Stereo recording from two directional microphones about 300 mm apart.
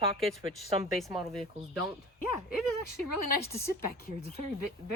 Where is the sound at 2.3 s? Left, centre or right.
Centre.